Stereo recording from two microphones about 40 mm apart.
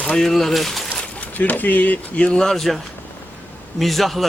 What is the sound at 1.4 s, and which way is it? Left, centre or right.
Speech, left.